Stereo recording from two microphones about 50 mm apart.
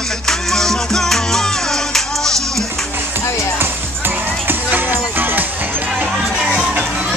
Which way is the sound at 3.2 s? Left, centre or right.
Left.